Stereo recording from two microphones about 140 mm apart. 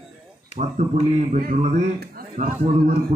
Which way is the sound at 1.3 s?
90° right.